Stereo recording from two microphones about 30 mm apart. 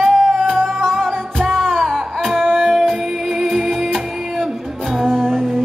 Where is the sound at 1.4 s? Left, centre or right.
Centre.